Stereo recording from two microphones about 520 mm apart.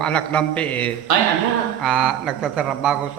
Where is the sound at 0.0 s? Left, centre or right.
Centre.